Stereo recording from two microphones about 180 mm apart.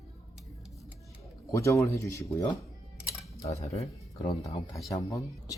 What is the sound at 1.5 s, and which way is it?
Speech, 15° left (ahead or behind).